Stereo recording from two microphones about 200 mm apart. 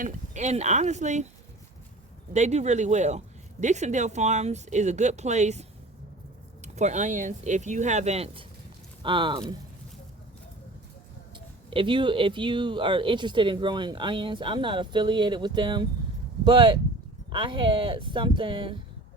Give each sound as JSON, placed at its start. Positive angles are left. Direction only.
{"t": 0.0, "sound": "speech", "side_deg": -35}
{"t": 2.3, "sound": "speech", "side_deg": -35}
{"t": 6.7, "sound": "speech", "side_deg": -35}
{"t": 11.7, "sound": "speech", "side_deg": -25}